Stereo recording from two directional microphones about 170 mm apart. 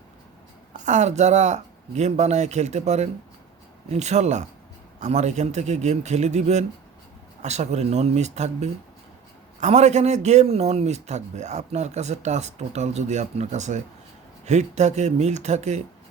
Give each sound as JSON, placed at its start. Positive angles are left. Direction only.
{"t": 0.7, "sound": "a man's voice", "side_deg": -45}